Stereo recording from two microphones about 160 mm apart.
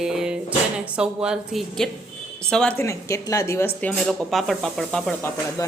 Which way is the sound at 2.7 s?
20° left (ahead or behind).